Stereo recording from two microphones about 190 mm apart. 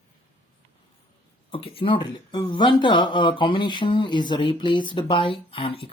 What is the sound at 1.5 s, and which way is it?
Speech, 30° left (ahead or behind).